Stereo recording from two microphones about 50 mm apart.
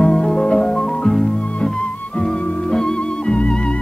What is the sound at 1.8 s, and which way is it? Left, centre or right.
Music, left.